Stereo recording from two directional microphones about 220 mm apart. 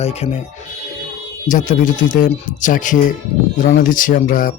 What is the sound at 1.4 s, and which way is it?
Speech, 35° left (ahead or behind).